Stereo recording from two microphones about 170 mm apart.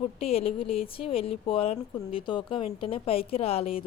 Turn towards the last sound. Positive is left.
turn(degrees=35)  # may be behind; listen again after turning